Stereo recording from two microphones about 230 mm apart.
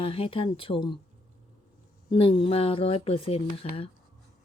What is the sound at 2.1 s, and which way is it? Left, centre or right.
Speech, left.